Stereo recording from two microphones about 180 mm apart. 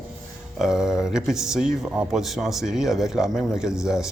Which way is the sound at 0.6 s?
5° right (ahead or behind).